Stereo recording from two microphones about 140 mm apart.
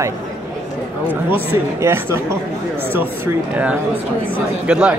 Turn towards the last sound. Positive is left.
turn(degrees=-5)  # may be behind; listen again after turning